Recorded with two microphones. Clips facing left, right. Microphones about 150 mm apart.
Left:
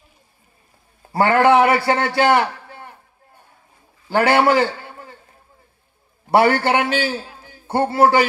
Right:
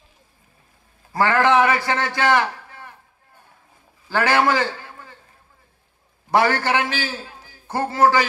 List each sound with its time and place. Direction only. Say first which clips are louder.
1.1 s a man's voice: left 3 dB; 30° left (ahead or behind)
4.1 s a man's voice: left 4 dB; 30° left (ahead or behind)
6.3 s a man's voice: left 4 dB; 30° left (ahead or behind)